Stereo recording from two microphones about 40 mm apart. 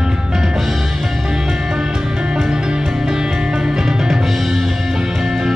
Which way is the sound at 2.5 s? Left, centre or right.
Centre.